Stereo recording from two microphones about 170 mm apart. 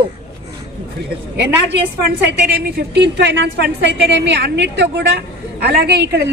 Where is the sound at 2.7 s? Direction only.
80° right.